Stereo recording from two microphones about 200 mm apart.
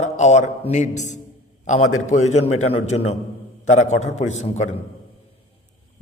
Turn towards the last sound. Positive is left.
turn(degrees=35)  # may be behind; listen again after turning